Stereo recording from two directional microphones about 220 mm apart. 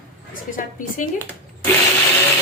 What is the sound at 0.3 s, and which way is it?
Speech, 35° left (ahead or behind).